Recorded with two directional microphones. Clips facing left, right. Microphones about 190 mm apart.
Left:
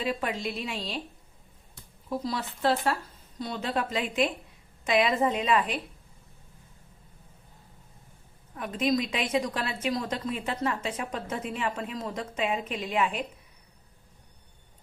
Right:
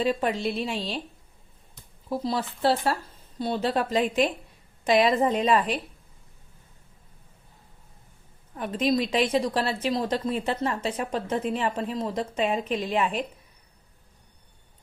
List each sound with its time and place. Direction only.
0.2 s a woman's voice: 30° right (ahead or behind)
0.7 s a woman's voice: centre (ahead or behind)
2.0 s a woman's voice: 30° right (ahead or behind)
8.5 s a woman's voice: 30° right (ahead or behind)